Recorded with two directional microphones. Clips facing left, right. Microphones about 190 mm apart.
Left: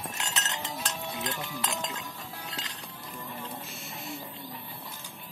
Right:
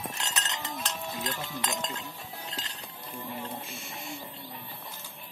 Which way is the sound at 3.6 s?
Centre (ahead or behind).